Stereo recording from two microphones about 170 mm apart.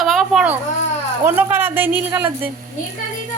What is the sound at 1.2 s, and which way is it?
A woman's voice, 15° right (ahead or behind).